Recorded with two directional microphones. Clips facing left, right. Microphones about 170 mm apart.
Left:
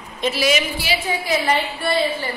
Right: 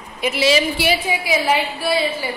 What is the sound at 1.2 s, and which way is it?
Speech, 10° right (ahead or behind).